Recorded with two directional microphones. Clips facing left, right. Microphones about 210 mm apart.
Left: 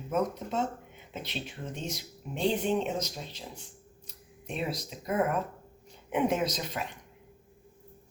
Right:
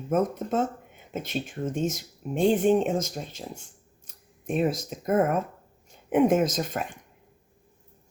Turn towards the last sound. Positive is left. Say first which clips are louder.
# right 5 dB
turn(degrees=-50)  # may be behind; listen again after turning